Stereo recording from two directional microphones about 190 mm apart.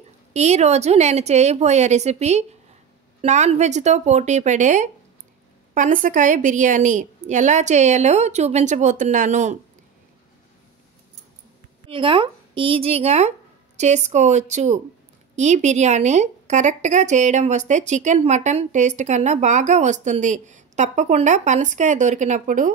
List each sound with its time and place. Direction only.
0.3 s a woman's voice: 35° right (ahead or behind)
11.9 s a woman's voice: 25° right (ahead or behind)